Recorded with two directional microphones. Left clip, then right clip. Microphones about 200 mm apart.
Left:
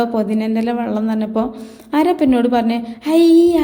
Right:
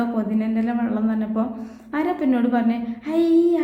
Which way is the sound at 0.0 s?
40° left (ahead or behind).